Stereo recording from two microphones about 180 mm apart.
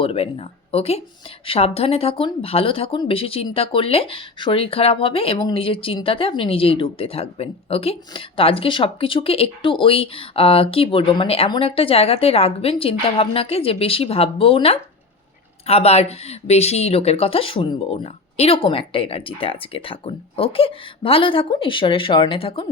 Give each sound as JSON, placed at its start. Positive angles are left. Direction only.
{"t": 0.0, "sound": "speech", "side_deg": 30}